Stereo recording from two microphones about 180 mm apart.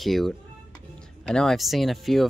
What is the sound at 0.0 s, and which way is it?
Speech, centre (ahead or behind).